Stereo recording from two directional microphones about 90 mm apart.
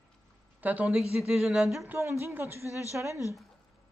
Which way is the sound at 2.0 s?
35° right (ahead or behind).